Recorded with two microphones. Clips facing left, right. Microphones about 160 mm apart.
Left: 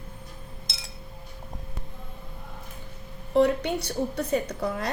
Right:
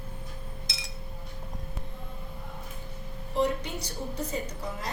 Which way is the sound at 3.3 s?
60° left (ahead or behind).